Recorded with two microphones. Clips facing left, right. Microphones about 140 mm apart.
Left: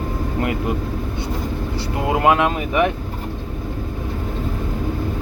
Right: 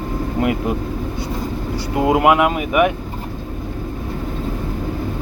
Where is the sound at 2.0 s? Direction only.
15° right (ahead or behind).